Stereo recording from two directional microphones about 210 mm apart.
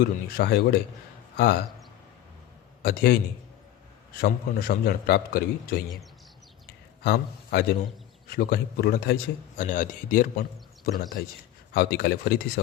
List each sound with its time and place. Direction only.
0.0 s a man's voice: 45° left (ahead or behind)
2.8 s a man's voice: 45° left (ahead or behind)
4.2 s a man's voice: 45° left (ahead or behind)
7.0 s a man's voice: 50° left (ahead or behind)